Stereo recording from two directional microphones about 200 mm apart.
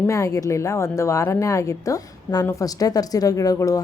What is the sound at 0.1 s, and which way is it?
A woman's voice, 15° left (ahead or behind).